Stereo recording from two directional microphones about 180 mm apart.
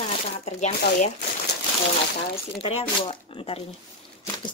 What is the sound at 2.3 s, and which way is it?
Speech, 35° left (ahead or behind).